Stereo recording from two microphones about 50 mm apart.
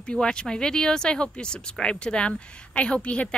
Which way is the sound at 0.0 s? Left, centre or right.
Centre.